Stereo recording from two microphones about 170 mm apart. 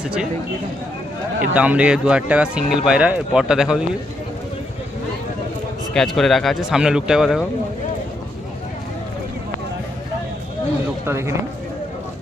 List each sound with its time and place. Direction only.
0.0 s speech: 5° right (ahead or behind)
1.5 s speech: 10° right (ahead or behind)
5.9 s speech: centre (ahead or behind)
11.0 s speech: 15° right (ahead or behind)